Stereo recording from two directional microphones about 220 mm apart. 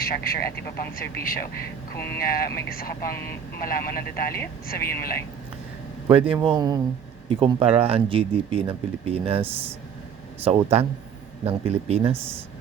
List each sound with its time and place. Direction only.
0.0 s speech: 40° left (ahead or behind)
6.1 s speech: 25° right (ahead or behind)